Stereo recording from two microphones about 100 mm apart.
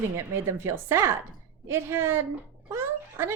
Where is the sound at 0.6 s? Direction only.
30° right (ahead or behind).